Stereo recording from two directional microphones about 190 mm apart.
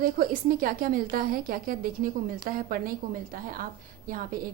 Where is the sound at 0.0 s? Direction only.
45° right (ahead or behind).